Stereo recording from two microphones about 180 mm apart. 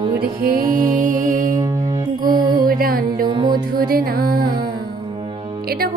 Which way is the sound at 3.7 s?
55° right (ahead or behind).